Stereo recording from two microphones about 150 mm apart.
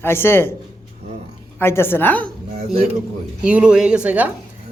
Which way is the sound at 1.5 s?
15° left (ahead or behind).